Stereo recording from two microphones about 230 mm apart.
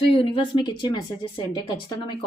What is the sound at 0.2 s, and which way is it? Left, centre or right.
A woman's voice, left.